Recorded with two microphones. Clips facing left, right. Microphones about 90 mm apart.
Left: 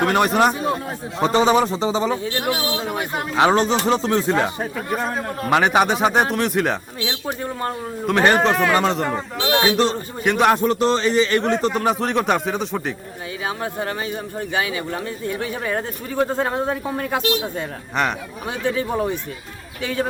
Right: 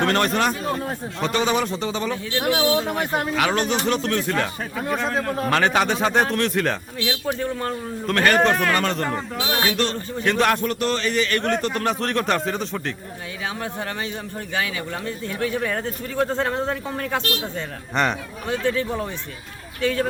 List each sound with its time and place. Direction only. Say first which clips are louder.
0.0 s a man's voice: left 4 dB; 10° left (ahead or behind)
2.4 s speech: right 3 dB; centre (ahead or behind)
3.3 s speech: left 8 dB; 25° left (ahead or behind)
4.9 s a man's voice: right 3 dB; 5° left (ahead or behind)
9.0 s speech: left 2 dB; centre (ahead or behind)
9.6 s a man's voice: left 6 dB; 20° left (ahead or behind)